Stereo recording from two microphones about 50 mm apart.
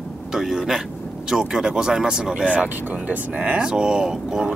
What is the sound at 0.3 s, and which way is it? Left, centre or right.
Speech, centre.